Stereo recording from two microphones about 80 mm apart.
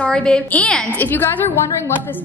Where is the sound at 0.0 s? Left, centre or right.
Centre.